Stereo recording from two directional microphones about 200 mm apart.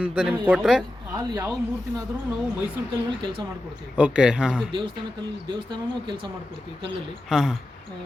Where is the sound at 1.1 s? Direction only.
15° right (ahead or behind).